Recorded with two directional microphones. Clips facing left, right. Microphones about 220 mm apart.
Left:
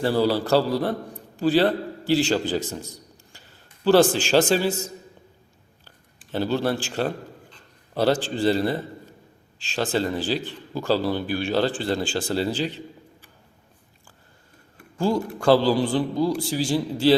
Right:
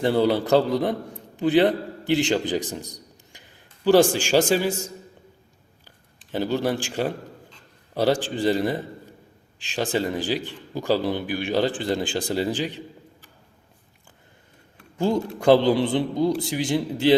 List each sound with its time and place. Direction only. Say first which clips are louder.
0.0 s a man's voice: right 1 dB; 20° right (ahead or behind)
6.3 s a man's voice: even; 15° right (ahead or behind)
14.9 s a man's voice: even; 20° right (ahead or behind)